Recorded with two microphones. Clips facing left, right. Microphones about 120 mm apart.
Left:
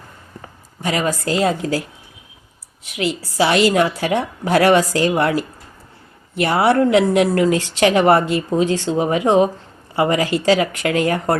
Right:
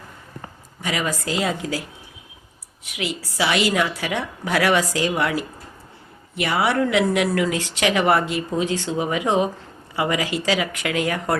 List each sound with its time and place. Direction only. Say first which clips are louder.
0.8 s a woman's voice: left 5 dB; 40° left (ahead or behind)
2.8 s a woman's voice: left 6 dB; 35° left (ahead or behind)
4.9 s a woman's voice: left 5 dB; 50° left (ahead or behind)
5.1 s a woman's voice: left 5 dB; 35° left (ahead or behind)
6.4 s a woman's voice: left 6 dB; 40° left (ahead or behind)